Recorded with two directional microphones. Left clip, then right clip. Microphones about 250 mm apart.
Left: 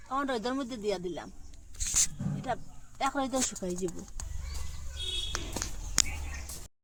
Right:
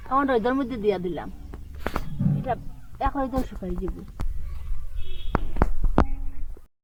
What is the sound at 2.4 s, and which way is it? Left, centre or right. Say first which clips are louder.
Speech: right 2 dB; left.